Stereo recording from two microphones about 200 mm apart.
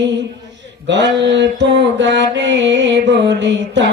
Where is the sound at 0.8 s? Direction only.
60° right (ahead or behind).